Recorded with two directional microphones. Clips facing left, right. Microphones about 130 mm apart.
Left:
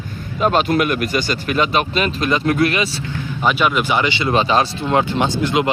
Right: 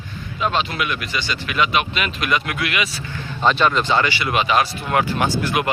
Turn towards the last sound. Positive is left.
turn(degrees=20)  # may be behind; listen again after turning